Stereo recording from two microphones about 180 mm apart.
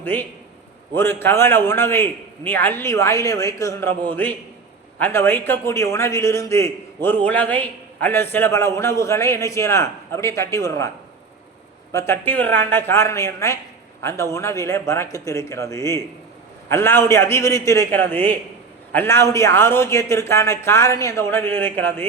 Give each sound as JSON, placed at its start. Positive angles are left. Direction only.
{"t": 0.0, "sound": "a man's voice", "side_deg": 10}